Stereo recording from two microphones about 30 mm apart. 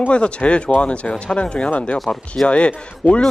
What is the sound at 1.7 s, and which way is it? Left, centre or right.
Speech, left.